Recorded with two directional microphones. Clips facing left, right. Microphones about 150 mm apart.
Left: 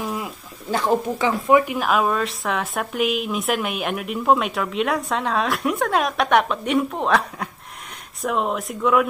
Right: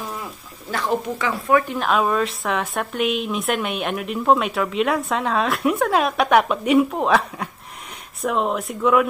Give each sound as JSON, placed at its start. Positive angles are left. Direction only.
{"t": 0.1, "sound": "bird", "side_deg": 20}
{"t": 1.6, "sound": "speech", "side_deg": 10}